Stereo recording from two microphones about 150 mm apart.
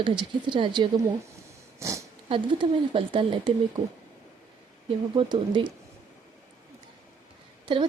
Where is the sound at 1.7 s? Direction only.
20° right (ahead or behind).